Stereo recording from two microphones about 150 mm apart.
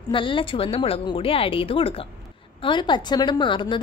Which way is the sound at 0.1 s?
35° left (ahead or behind).